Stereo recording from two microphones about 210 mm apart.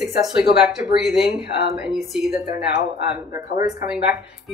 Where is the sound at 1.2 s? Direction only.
50° left (ahead or behind).